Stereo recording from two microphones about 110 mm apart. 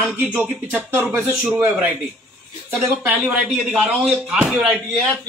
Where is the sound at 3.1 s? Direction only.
10° right (ahead or behind).